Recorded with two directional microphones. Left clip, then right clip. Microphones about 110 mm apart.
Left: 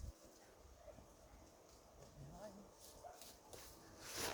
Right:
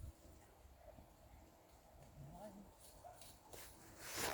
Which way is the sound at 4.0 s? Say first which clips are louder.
Right 2 dB; 90° right.